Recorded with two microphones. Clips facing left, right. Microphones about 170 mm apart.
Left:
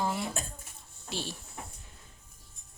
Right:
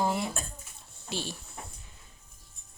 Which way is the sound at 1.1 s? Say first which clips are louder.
Right 2 dB; centre (ahead or behind).